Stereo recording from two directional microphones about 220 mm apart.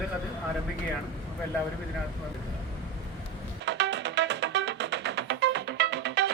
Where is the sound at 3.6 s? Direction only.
50° right (ahead or behind).